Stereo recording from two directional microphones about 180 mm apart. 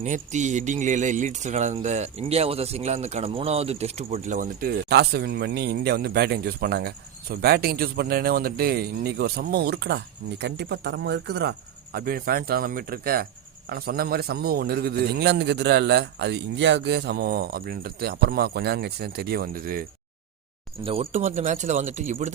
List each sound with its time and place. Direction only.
0.0 s speech: 40° right (ahead or behind)
4.9 s speech: 65° right (ahead or behind)
20.8 s speech: 30° right (ahead or behind)